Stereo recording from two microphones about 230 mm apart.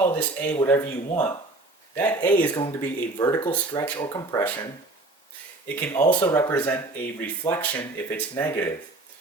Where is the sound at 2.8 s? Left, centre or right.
Centre.